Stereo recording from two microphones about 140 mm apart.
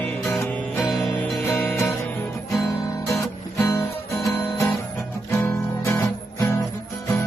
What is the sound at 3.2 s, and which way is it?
Music, 20° left (ahead or behind).